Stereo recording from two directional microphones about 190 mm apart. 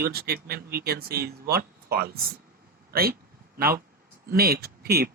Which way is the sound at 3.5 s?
50° right (ahead or behind).